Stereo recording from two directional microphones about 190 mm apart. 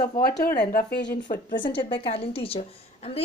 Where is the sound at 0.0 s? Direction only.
55° left (ahead or behind).